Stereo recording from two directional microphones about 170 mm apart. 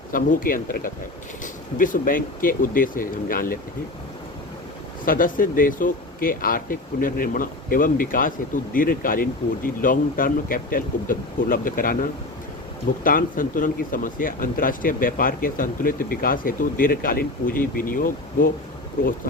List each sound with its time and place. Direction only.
0.1 s speech: 55° left (ahead or behind)
5.0 s speech: 55° left (ahead or behind)
13.1 s speech: 55° left (ahead or behind)